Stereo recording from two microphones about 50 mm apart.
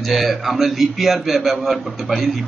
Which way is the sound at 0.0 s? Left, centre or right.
Centre.